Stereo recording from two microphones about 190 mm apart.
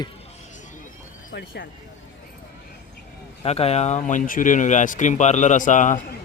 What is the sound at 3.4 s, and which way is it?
Speech, 30° left (ahead or behind).